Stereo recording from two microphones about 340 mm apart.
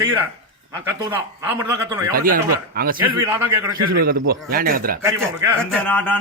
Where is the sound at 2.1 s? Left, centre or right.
Right.